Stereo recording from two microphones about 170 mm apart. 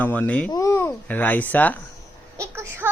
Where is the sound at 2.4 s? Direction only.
15° right (ahead or behind).